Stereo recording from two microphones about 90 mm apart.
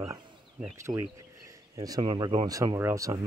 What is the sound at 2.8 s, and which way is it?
Speech, 35° right (ahead or behind).